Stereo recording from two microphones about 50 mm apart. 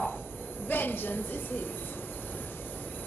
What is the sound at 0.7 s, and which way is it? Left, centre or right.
A woman's voice, left.